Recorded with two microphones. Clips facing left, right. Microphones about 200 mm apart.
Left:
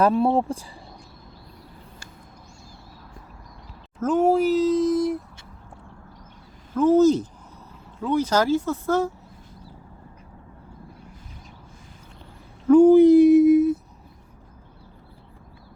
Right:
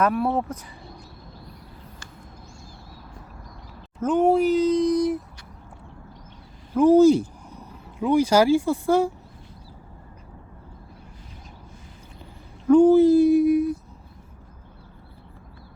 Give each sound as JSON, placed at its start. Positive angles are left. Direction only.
{"t": 0.0, "sound": "speech", "side_deg": 25}
{"t": 4.0, "sound": "speech", "side_deg": 0}
{"t": 6.7, "sound": "speech", "side_deg": -10}
{"t": 12.7, "sound": "a sound", "side_deg": 10}